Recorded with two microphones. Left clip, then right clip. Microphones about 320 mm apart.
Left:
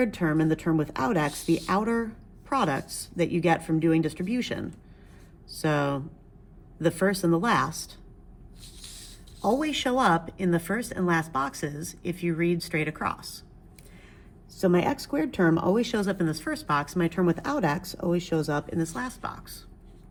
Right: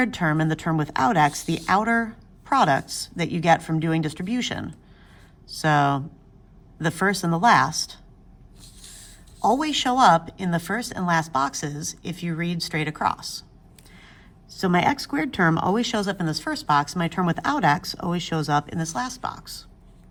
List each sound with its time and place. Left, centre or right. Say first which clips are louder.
0.0 s a woman's voice: right 2 dB; centre
8.6 s a sound: left 1 dB; centre
9.4 s a woman's voice: right 5 dB; centre
14.5 s a woman's voice: right 3 dB; right